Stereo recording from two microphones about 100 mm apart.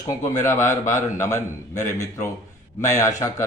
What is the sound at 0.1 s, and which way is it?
Speech, 30° left (ahead or behind).